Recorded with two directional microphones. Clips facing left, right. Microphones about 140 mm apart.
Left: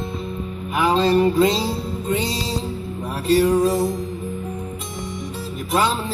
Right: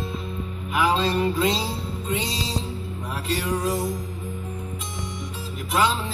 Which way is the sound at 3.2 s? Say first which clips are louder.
Left 10 dB; 35° left (ahead or behind).